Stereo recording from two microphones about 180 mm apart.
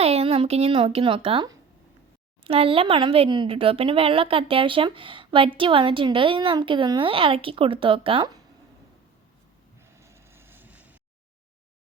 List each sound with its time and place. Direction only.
0.0 s speech: 35° right (ahead or behind)
10.0 s vehicle: 15° right (ahead or behind)